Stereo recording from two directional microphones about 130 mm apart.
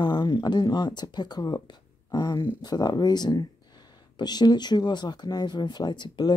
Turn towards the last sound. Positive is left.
turn(degrees=35)  # may be behind; listen again after turning